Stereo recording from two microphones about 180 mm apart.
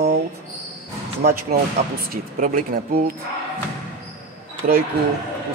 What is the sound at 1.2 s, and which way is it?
Speech, 55° right (ahead or behind).